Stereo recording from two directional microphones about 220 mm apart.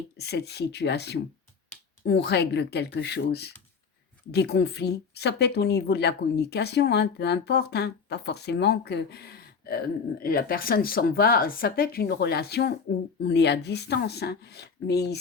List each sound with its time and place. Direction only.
0.2 s speech: 50° left (ahead or behind)